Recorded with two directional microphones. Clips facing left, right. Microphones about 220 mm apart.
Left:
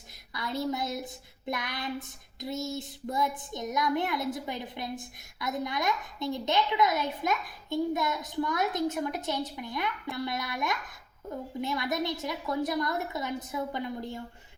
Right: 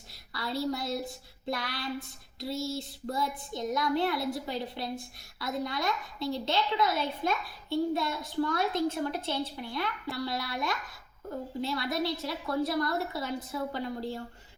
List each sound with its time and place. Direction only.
0.3 s child singing: 20° left (ahead or behind)